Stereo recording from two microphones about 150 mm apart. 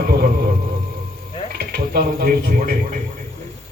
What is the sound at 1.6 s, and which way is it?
Speech, 90° right.